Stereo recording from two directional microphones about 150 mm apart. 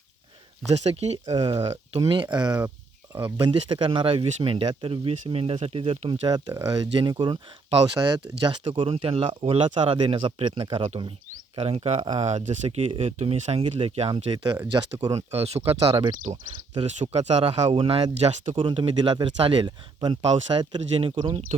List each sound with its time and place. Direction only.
0.7 s speech: 45° right (ahead or behind); by 2.6 s 30° right (ahead or behind)
3.2 s speech: 15° right (ahead or behind)
3.4 s speech: 35° right (ahead or behind)
12.1 s speech: 50° right (ahead or behind); by 16.4 s 30° right (ahead or behind)
16.8 s speech: 50° right (ahead or behind)